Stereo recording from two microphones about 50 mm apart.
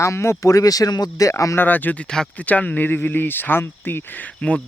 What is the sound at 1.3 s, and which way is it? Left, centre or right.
Speech, left.